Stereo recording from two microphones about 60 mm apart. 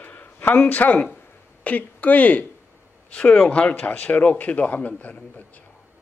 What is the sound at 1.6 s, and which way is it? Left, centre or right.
Speech, left.